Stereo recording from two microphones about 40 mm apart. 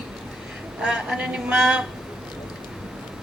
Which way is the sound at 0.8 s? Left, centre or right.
Centre.